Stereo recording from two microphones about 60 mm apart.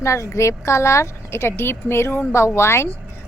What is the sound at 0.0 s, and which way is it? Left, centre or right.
A woman's voice, left.